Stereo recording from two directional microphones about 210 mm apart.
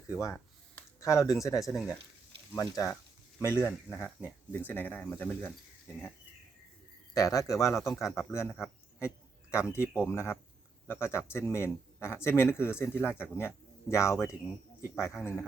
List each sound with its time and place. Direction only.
0.8 s speech: 15° left (ahead or behind)
7.1 s a man's voice: 15° left (ahead or behind)